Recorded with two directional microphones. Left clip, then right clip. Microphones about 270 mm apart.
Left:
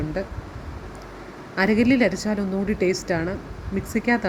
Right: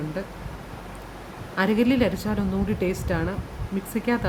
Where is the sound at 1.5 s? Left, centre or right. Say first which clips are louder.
Left 2 dB; centre.